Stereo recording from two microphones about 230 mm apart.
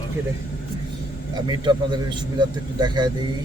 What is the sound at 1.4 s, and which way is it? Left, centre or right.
A man's voice, centre.